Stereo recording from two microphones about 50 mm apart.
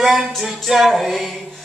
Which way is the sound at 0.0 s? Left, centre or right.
Centre.